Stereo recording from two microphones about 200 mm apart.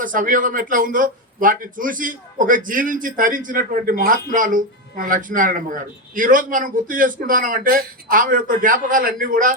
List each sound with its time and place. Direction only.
0.0 s speech: 40° right (ahead or behind)